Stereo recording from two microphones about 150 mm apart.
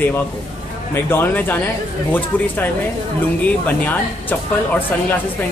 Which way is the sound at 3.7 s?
10° left (ahead or behind).